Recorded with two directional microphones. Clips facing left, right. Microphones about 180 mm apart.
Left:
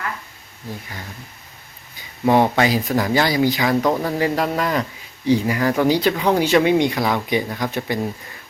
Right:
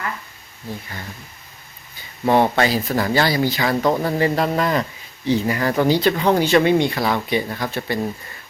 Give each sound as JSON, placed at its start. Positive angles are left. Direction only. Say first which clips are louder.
{"t": 2.2, "sound": "speech", "louder": "left 1 dB", "side_deg": 10}
{"t": 3.8, "sound": "speech", "louder": "right 1 dB", "side_deg": -5}
{"t": 4.2, "sound": "speech", "louder": "right 1 dB", "side_deg": 10}